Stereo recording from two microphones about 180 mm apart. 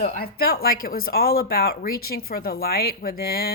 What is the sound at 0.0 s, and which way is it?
Speech, 60° left (ahead or behind).